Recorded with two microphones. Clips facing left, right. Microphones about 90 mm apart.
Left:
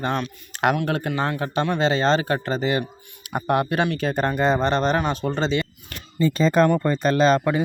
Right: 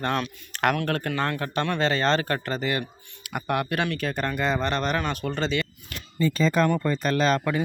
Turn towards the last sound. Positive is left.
turn(degrees=20)  # may be behind; listen again after turning